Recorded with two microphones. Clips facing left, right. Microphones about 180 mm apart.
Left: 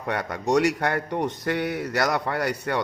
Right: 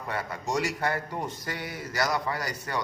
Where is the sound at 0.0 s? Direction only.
65° left (ahead or behind).